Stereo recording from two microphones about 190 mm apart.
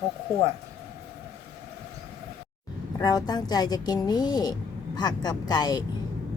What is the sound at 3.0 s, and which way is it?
A woman's voice, 20° left (ahead or behind).